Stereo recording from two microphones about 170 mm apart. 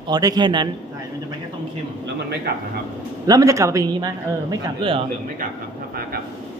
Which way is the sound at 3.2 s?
20° right (ahead or behind).